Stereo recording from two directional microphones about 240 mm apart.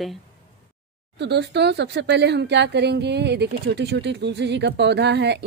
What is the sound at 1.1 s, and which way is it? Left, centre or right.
Speech, right.